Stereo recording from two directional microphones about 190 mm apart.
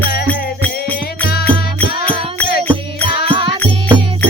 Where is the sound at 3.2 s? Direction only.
25° right (ahead or behind).